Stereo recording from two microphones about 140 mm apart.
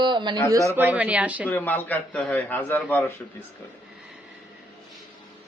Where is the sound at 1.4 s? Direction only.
15° left (ahead or behind).